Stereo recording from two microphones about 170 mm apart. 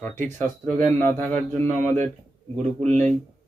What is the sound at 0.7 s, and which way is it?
Speech, 45° right (ahead or behind).